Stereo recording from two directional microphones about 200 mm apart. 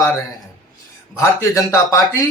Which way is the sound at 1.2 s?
15° left (ahead or behind).